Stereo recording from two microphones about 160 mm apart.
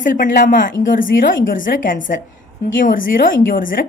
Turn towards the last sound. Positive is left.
turn(degrees=60)  # may be behind; listen again after turning